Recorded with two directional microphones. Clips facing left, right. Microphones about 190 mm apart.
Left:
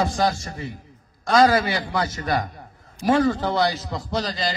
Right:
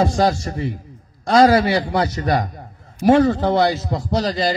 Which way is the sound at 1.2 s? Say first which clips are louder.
Right 4 dB; 25° right (ahead or behind).